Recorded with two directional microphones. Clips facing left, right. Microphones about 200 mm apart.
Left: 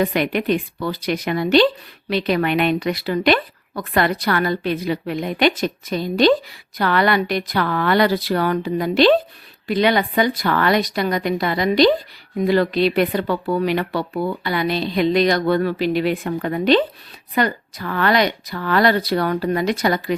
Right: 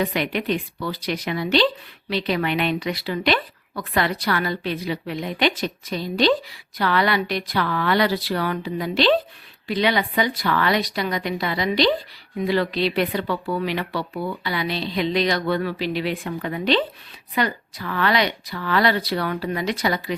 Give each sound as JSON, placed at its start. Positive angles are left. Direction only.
{"t": 0.0, "sound": "speech", "side_deg": 50}